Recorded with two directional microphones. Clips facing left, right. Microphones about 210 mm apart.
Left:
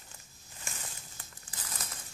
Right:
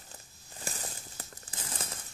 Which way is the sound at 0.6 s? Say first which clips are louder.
Right 6 dB; 35° right (ahead or behind).